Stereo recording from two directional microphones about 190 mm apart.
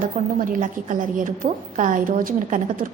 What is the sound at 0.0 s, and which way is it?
A woman's voice, 45° right (ahead or behind).